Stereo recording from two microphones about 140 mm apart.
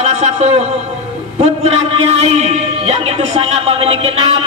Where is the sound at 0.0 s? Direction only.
55° right (ahead or behind).